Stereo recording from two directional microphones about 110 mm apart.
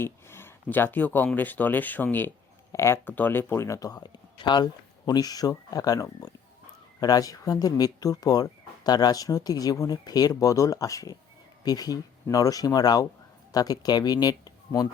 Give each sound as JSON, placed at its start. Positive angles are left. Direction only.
{"t": 0.0, "sound": "speech", "side_deg": 20}